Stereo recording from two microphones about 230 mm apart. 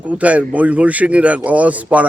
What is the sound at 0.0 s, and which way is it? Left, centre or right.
A man's voice, centre.